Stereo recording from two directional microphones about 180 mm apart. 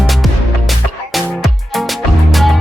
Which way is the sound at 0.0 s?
Centre (ahead or behind).